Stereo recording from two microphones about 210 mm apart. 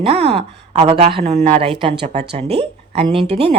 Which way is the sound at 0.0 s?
30° right (ahead or behind).